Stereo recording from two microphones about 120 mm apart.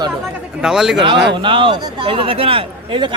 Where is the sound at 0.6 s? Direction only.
5° right (ahead or behind).